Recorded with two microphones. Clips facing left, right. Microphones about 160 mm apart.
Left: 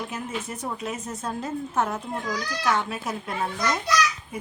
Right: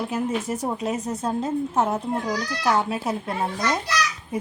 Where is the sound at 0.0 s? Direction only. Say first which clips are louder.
Right 7 dB; 35° right (ahead or behind).